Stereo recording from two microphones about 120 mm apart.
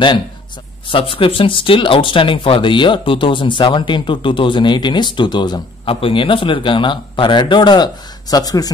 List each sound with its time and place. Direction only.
0.8 s speech: 50° left (ahead or behind); by 8.7 s 30° left (ahead or behind)